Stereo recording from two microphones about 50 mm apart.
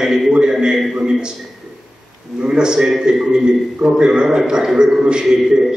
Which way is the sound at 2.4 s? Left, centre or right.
Centre.